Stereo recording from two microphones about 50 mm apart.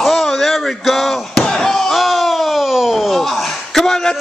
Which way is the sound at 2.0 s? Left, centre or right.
Centre.